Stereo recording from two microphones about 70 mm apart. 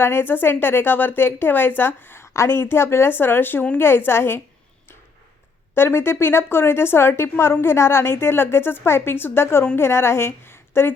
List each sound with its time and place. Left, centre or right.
0.0 s a woman's voice: left
5.7 s a woman's voice: left